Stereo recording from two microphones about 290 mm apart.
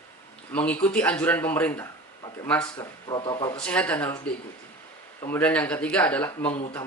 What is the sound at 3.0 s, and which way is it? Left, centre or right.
Speech, centre.